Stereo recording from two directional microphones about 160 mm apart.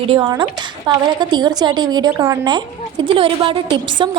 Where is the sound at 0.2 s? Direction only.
25° right (ahead or behind).